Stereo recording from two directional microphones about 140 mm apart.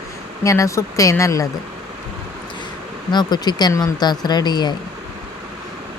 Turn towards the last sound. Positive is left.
turn(degrees=30)  # may be behind; listen again after turning